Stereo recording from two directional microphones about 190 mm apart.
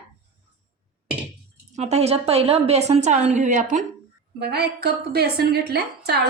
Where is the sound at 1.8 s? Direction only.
35° right (ahead or behind).